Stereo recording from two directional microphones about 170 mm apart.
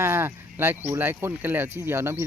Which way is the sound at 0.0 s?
15° right (ahead or behind).